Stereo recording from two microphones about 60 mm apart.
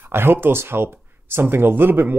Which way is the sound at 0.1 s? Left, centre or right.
Right.